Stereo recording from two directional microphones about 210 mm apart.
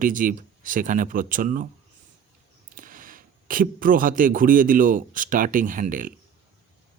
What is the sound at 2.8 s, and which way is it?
Speech, 40° right (ahead or behind).